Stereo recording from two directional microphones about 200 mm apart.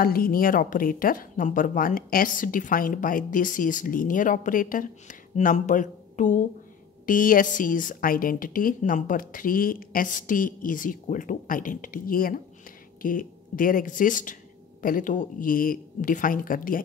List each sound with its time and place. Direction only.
0.0 s speech: 45° left (ahead or behind)